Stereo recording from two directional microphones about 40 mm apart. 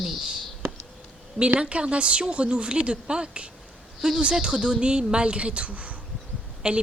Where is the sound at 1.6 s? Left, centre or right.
Right.